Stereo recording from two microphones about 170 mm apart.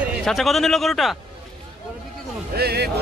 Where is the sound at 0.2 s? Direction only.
Centre (ahead or behind).